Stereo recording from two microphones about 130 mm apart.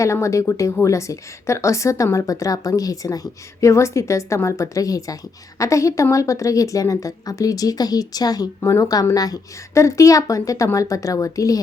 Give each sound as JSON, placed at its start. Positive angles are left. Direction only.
{"t": 0.0, "sound": "speech", "side_deg": 25}